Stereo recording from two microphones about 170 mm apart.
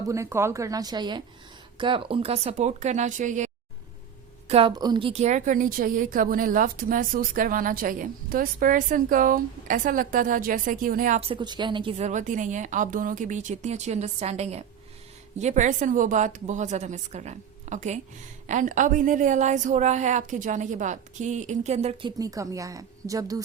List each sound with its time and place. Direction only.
0.1 s a woman's voice: 15° right (ahead or behind); by 3.5 s 45° right (ahead or behind)
4.4 s a woman's voice: 35° right (ahead or behind)
4.7 s a woman's voice: 25° right (ahead or behind); by 11.2 s 55° right (ahead or behind)
11.2 s a woman's voice: 30° right (ahead or behind)
22.2 s a woman's voice: 20° right (ahead or behind)